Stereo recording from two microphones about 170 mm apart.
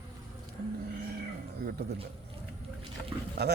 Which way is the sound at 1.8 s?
75° right (ahead or behind).